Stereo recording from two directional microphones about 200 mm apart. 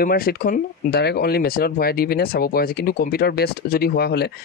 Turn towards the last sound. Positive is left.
turn(degrees=55)  # may be behind; listen again after turning